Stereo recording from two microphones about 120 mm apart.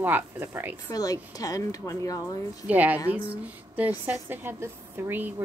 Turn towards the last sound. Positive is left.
turn(degrees=-15)  # may be behind; listen again after turning